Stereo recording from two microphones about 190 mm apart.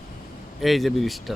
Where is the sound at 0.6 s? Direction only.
Centre (ahead or behind).